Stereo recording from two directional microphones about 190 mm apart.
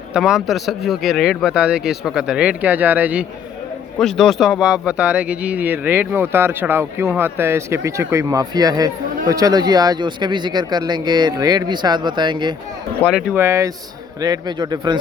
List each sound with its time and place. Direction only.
0.1 s speech: 5° right (ahead or behind)
3.9 s speech: centre (ahead or behind); by 12.5 s 25° right (ahead or behind)
13.0 s speech: centre (ahead or behind); by 14.9 s 20° right (ahead or behind)